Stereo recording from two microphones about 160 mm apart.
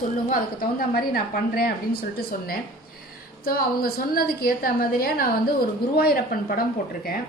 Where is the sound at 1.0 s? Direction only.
70° left (ahead or behind).